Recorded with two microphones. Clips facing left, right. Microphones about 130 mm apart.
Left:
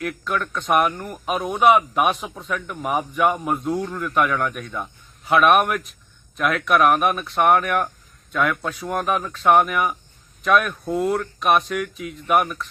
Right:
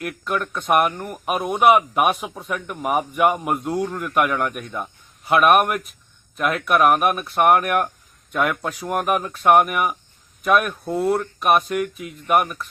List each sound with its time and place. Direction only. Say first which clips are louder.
0.0 s speech: even; 5° right (ahead or behind)